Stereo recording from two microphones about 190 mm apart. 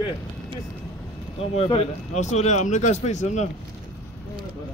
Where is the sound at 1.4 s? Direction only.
30° left (ahead or behind).